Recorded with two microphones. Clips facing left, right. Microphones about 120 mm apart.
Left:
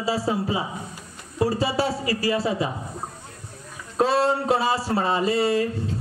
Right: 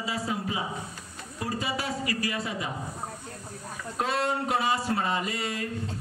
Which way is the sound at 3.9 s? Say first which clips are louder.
Left 8 dB; 30° left (ahead or behind).